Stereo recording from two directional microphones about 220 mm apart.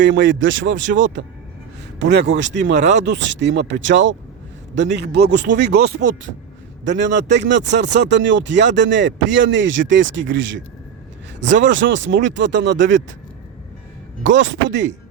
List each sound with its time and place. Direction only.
0.0 s speech: 55° right (ahead or behind)
14.3 s speech: 55° right (ahead or behind)